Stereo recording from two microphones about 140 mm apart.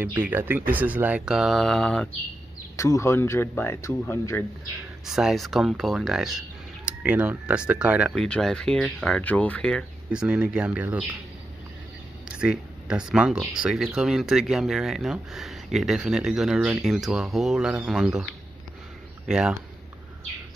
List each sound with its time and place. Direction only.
0.0 s speech: 15° right (ahead or behind); by 2.0 s 5° left (ahead or behind)
2.7 s speech: 20° left (ahead or behind)
5.0 s speech: 5° right (ahead or behind)
8.1 s speech: 5° left (ahead or behind)
10.1 s speech: 5° right (ahead or behind)
12.4 s speech: 5° right (ahead or behind)